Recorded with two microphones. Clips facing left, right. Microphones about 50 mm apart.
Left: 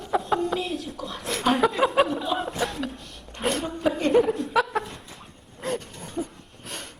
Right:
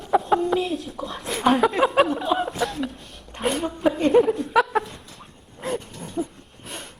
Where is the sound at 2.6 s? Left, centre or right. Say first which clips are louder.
Right 2 dB; centre.